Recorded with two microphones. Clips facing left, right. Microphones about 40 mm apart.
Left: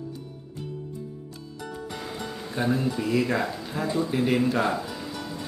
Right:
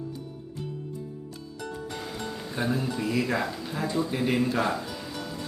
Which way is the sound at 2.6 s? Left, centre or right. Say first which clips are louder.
Left 3 dB; centre.